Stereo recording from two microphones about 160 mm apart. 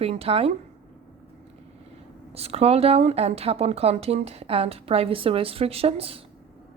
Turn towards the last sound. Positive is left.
turn(degrees=-35)  # may be behind; listen again after turning